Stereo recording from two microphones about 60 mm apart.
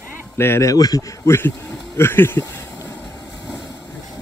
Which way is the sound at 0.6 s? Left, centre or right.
Left.